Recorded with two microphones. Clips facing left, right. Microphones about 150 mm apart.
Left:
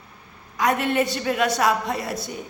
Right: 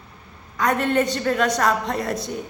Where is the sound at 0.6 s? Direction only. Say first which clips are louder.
Right 1 dB; 10° left (ahead or behind).